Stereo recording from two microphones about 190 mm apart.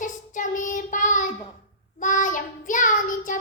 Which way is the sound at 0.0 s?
40° left (ahead or behind).